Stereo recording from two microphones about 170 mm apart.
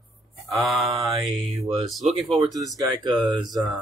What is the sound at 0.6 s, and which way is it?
Speech, centre (ahead or behind).